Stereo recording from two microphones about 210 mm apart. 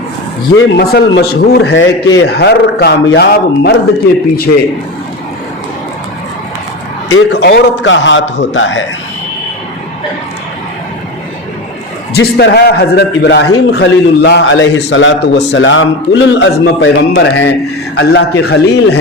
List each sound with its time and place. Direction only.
0.5 s a man's voice: 50° left (ahead or behind)
7.1 s a man's voice: 55° left (ahead or behind)
12.1 s a man's voice: 50° left (ahead or behind)